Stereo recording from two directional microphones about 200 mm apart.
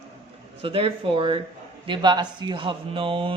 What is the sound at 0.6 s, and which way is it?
Speech, 25° right (ahead or behind).